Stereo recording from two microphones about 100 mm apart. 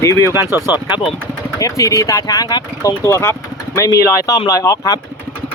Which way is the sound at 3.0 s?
30° left (ahead or behind).